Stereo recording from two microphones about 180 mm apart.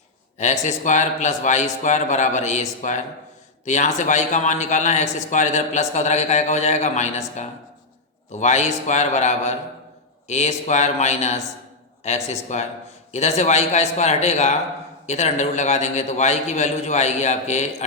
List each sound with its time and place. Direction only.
0.3 s a man's voice: 40° left (ahead or behind)